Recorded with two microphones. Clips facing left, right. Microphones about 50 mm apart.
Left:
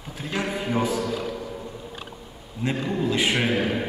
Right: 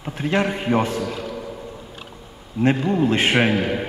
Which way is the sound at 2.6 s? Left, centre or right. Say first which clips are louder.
Right 7 dB; right.